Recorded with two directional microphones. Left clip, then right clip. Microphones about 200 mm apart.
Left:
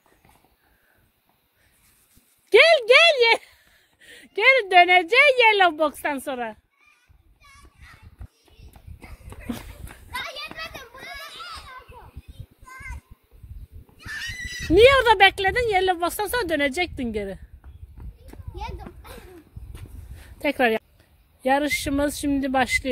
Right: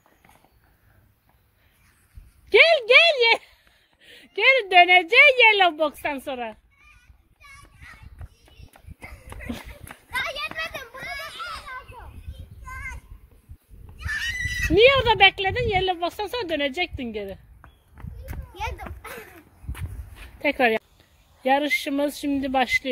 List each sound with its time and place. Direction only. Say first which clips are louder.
2.5 s a sound: left 1 dB; 40° left (ahead or behind)
4.0 s a woman's voice: left 1 dB; 35° left (ahead or behind)
8.7 s horse: right 5 dB; centre (ahead or behind)
9.5 s a sound: left 2 dB; 35° left (ahead or behind)
10.4 s children playing: right 5 dB; centre (ahead or behind)
14.0 s neigh: right 5 dB; centre (ahead or behind)
14.7 s speech: left 2 dB; 35° left (ahead or behind)
17.9 s horse: right 5 dB; 10° right (ahead or behind)
18.6 s a sound: right 5 dB; 10° right (ahead or behind)
20.3 s speech: even; 15° left (ahead or behind)